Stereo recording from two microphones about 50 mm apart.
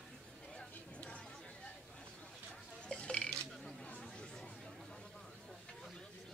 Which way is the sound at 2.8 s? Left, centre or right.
Left.